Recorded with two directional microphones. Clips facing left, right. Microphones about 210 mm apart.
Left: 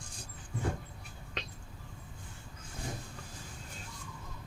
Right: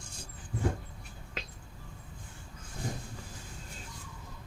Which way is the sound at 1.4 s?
5° right (ahead or behind).